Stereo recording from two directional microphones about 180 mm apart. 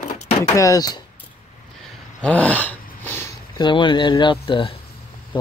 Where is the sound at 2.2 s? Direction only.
5° left (ahead or behind).